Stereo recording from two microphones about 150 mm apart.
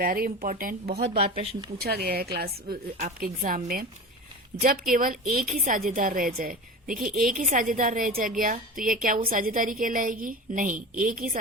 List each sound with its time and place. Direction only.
0.0 s speech: 75° right (ahead or behind)
0.9 s speech: 45° right (ahead or behind)
1.8 s a woman's voice: 90° right
3.2 s a woman's voice: 70° right (ahead or behind)